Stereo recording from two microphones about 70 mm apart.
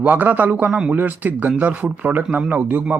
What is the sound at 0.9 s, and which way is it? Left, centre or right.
Speech, right.